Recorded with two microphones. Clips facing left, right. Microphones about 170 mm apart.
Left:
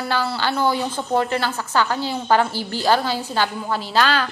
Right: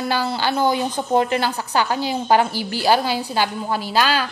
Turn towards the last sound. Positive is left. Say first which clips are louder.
# even
turn(degrees=-10)  # may be behind; listen again after turning